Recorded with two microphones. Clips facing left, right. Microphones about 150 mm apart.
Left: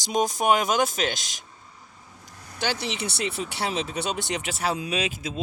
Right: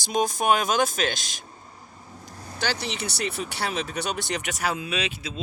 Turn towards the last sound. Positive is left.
turn(degrees=45)  # may be behind; listen again after turning